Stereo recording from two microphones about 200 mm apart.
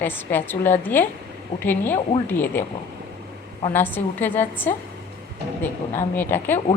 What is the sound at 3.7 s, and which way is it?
A woman's voice, 10° left (ahead or behind).